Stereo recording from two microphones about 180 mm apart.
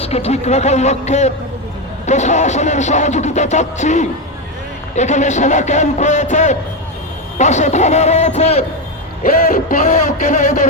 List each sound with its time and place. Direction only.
0.0 s speech: 35° left (ahead or behind)
9.6 s speech: 45° left (ahead or behind)